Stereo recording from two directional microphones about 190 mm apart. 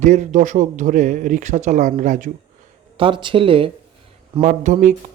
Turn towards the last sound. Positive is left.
turn(degrees=-40)  # may be behind; listen again after turning